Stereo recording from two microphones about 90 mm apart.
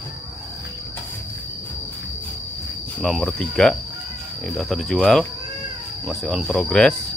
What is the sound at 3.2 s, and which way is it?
Speech, 10° left (ahead or behind).